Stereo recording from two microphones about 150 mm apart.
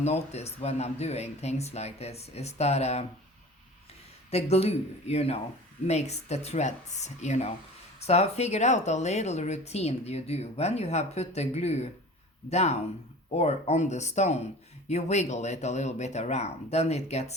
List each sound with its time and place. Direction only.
0.0 s a woman's voice: 45° left (ahead or behind)
4.3 s a woman's voice: 45° left (ahead or behind)